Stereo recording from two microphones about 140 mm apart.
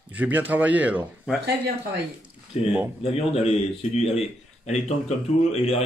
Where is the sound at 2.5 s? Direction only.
50° left (ahead or behind).